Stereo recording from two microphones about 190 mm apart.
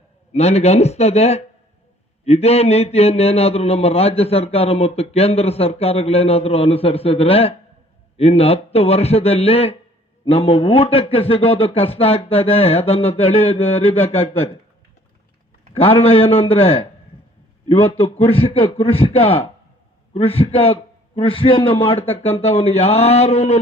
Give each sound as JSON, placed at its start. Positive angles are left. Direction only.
{"t": 0.3, "sound": "speech", "side_deg": 35}
{"t": 15.7, "sound": "speech", "side_deg": 30}
{"t": 18.0, "sound": "speech", "side_deg": 30}